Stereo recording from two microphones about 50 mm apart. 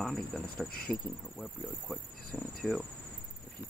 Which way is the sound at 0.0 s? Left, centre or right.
Centre.